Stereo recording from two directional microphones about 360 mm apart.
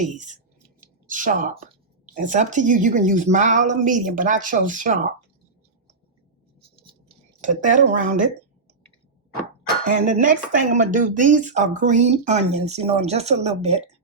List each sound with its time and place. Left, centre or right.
1.0 s speech: right
7.1 s speech: right
9.8 s speech: right